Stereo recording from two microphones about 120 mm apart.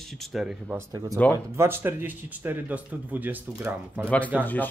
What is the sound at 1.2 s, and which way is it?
Speech, 15° left (ahead or behind).